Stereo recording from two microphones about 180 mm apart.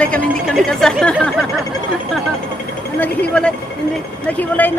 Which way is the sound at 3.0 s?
5° left (ahead or behind).